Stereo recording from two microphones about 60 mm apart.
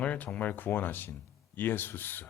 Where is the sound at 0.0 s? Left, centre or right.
Left.